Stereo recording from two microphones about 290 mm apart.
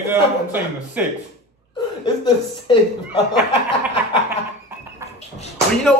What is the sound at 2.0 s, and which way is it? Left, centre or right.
Speech, centre.